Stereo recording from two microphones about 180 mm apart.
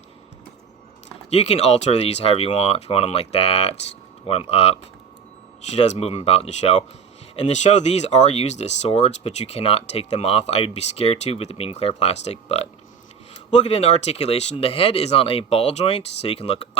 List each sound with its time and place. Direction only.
1.3 s speech: 35° left (ahead or behind)